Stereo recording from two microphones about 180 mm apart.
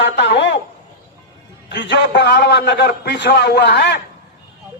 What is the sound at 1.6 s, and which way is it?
A man's voice, 75° left (ahead or behind).